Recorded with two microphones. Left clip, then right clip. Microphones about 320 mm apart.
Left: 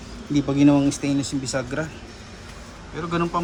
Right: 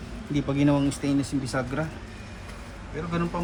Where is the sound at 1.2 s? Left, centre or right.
Left.